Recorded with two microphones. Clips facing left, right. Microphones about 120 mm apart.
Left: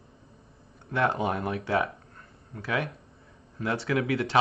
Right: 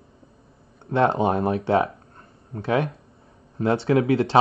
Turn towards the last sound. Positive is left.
turn(degrees=-30)  # may be behind; listen again after turning